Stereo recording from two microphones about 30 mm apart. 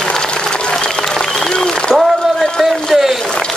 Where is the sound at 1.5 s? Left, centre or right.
Left.